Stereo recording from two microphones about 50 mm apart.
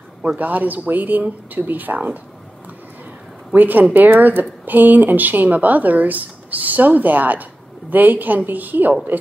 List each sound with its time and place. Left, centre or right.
0.4 s speech: right
3.5 s speech: right